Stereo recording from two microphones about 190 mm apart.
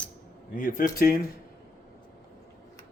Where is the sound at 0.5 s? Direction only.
45° left (ahead or behind).